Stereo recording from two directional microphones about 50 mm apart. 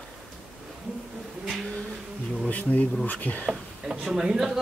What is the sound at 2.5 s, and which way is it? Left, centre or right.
Speech, left.